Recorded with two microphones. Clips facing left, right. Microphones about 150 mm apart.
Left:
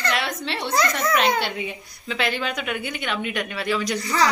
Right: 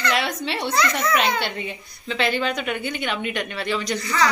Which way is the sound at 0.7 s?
40° left (ahead or behind).